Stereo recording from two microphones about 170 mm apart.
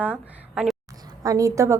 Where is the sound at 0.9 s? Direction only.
20° right (ahead or behind).